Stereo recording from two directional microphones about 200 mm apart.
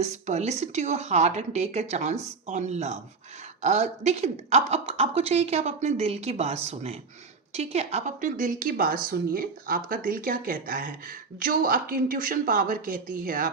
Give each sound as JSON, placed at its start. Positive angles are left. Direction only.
{"t": 0.0, "sound": "a woman's voice", "side_deg": -35}